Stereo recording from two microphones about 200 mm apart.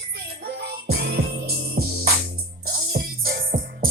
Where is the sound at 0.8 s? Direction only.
50° right (ahead or behind).